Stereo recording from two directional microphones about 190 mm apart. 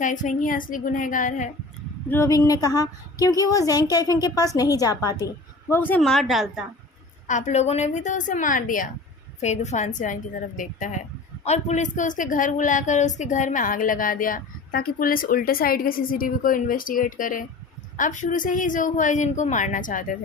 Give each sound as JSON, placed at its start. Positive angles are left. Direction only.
{"t": 0.0, "sound": "speech", "side_deg": 40}
{"t": 2.0, "sound": "a woman's voice", "side_deg": 15}
{"t": 7.3, "sound": "a woman's voice", "side_deg": 40}